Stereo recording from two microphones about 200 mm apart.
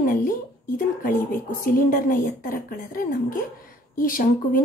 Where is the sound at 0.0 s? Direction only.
45° left (ahead or behind).